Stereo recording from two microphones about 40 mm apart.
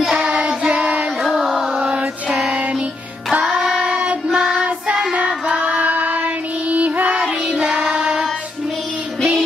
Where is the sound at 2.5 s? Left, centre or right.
Right.